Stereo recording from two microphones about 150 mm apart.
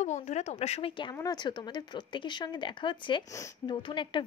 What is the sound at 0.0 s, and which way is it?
A woman's voice, 50° left (ahead or behind).